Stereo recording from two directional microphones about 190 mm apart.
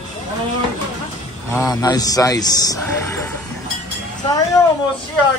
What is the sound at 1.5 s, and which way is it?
Speech, 20° left (ahead or behind).